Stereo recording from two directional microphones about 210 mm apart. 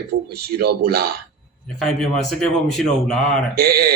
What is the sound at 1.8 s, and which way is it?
A man's voice, centre (ahead or behind).